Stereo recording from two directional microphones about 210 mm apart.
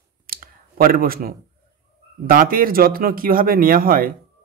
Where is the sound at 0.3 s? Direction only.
45° right (ahead or behind).